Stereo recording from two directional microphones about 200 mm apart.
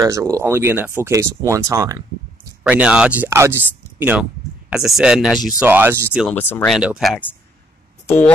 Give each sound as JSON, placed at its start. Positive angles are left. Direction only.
{"t": 0.0, "sound": "speech", "side_deg": -15}
{"t": 2.6, "sound": "speech", "side_deg": -5}
{"t": 6.2, "sound": "speech", "side_deg": 5}